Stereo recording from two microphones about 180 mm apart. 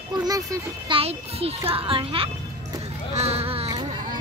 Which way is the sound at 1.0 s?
35° right (ahead or behind).